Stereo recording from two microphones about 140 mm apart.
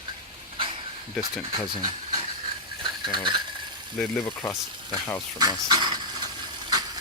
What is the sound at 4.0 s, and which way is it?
Speech, 15° left (ahead or behind).